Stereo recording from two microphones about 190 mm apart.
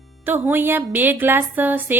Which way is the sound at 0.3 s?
10° right (ahead or behind).